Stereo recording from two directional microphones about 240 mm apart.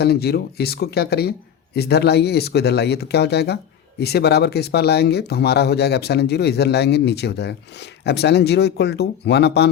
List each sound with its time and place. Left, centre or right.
0.0 s speech: left